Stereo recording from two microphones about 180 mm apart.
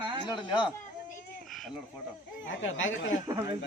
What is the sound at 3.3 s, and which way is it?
Speech, 20° right (ahead or behind).